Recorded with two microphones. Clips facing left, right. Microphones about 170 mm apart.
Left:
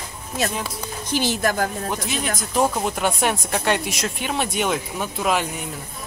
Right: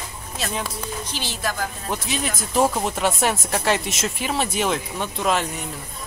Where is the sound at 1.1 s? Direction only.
50° left (ahead or behind).